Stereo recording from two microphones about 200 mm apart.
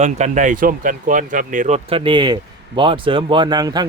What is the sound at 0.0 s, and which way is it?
Speech, 35° right (ahead or behind).